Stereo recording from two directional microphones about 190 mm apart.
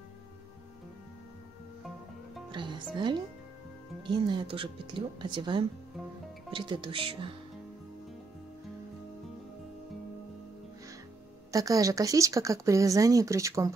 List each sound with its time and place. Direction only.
2.5 s music: 25° right (ahead or behind)
4.0 s speech: 25° right (ahead or behind)
11.5 s speech: 20° right (ahead or behind)